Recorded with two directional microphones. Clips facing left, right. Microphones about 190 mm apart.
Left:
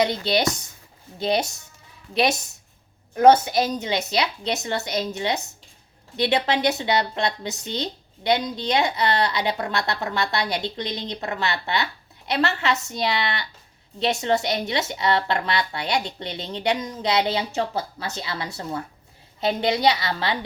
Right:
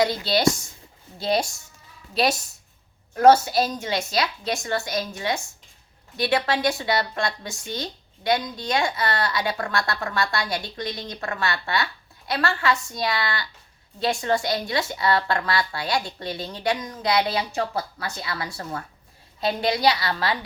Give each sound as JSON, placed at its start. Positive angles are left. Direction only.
{"t": 0.0, "sound": "speech", "side_deg": 20}